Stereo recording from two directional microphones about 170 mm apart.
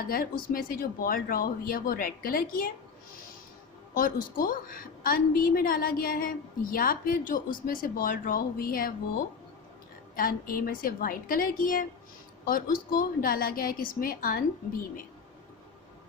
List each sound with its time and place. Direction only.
0.1 s a woman's voice: 60° left (ahead or behind)
3.9 s a woman's voice: 55° left (ahead or behind)
10.2 s a woman's voice: 55° left (ahead or behind)